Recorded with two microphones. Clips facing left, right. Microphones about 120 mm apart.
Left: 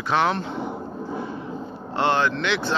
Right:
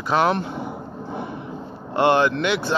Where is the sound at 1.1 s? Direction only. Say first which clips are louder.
Right 1 dB; 60° right (ahead or behind).